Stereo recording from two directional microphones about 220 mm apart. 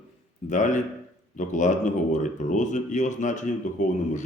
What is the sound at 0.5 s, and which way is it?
Speech, 35° left (ahead or behind).